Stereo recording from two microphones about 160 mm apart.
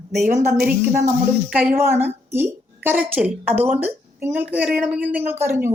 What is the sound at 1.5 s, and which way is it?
A woman's voice, 10° right (ahead or behind).